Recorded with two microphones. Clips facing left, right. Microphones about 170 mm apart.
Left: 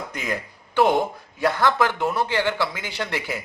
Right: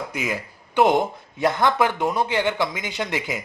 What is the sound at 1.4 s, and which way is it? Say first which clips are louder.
Speech: right 1 dB; 20° right (ahead or behind).